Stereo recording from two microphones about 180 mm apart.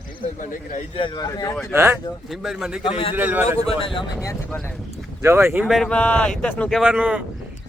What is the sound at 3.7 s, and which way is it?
Speech, 30° left (ahead or behind).